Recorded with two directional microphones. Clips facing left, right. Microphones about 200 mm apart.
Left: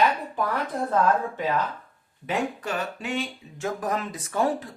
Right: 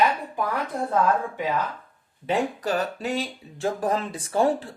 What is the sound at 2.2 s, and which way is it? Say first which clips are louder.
Speech: right 3 dB; 35° right (ahead or behind).